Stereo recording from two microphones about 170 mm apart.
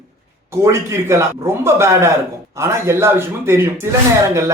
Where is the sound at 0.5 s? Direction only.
15° right (ahead or behind).